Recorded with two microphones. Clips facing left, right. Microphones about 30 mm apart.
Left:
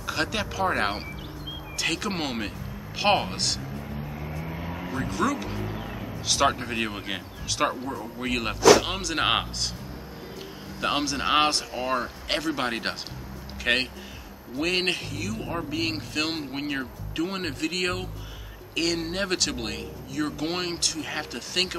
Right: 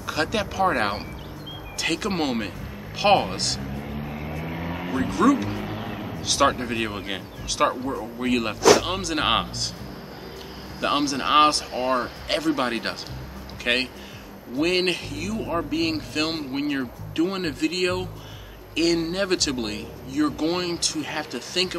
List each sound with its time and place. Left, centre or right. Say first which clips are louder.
0.0 s speech: right 3 dB; centre
3.8 s vehicle: right 3 dB; right
5.1 s speech: right 8 dB; centre
5.6 s music: right 3 dB; right
6.2 s speech: right 2 dB; centre
10.8 s speech: right 3 dB; centre
11.7 s speech: right 4 dB; right
12.3 s speech: right 4 dB; centre